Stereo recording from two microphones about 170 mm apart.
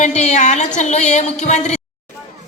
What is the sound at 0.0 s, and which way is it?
A woman's voice, 40° left (ahead or behind).